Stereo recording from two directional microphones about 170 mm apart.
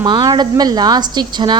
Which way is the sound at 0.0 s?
25° right (ahead or behind).